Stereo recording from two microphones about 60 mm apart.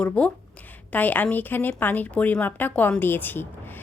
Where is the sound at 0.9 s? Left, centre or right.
Left.